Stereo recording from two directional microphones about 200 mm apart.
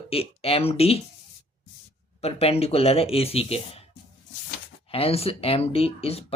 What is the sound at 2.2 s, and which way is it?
Speech, 30° left (ahead or behind).